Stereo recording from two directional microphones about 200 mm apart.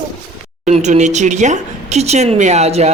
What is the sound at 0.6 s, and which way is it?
A woman's voice, 35° right (ahead or behind).